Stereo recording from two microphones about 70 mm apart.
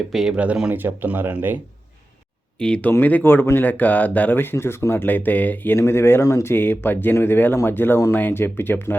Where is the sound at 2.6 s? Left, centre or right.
Centre.